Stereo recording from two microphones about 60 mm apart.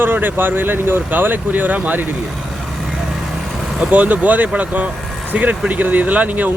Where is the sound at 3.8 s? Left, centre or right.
Right.